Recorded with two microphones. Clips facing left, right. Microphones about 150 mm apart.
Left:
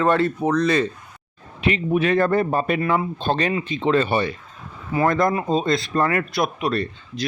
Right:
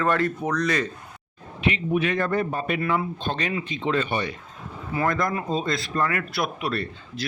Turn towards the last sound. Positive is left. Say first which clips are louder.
# left 4 dB
turn(degrees=25)  # may be behind; listen again after turning